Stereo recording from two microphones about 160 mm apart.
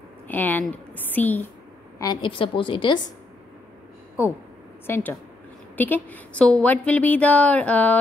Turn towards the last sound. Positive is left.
turn(degrees=10)  # may be behind; listen again after turning